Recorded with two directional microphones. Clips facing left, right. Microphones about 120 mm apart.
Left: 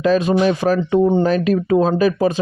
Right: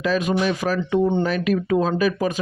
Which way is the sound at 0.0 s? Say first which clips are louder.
Left 6 dB; 40° left (ahead or behind).